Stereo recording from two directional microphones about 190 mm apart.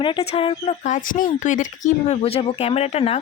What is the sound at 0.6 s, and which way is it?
Speech, 40° left (ahead or behind).